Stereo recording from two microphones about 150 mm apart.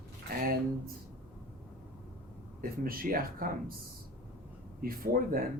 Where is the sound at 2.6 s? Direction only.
75° right (ahead or behind).